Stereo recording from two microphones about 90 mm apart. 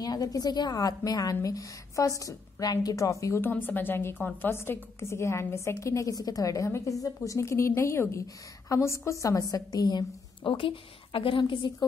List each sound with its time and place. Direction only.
0.0 s a woman's voice: 45° left (ahead or behind)
3.3 s a woman's voice: 20° left (ahead or behind); by 11.7 s 65° left (ahead or behind)